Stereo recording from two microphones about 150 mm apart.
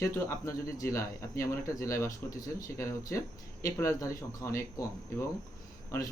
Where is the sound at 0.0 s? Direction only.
20° left (ahead or behind).